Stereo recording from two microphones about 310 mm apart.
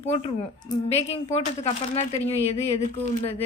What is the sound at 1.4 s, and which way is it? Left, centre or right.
Speech, centre.